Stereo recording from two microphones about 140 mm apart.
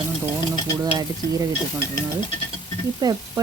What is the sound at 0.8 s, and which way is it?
Speech, 25° right (ahead or behind).